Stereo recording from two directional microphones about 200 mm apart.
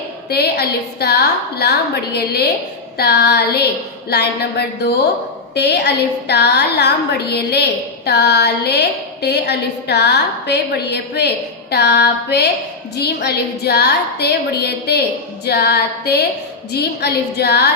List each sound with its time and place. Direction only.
0.3 s a woman's voice: 55° left (ahead or behind)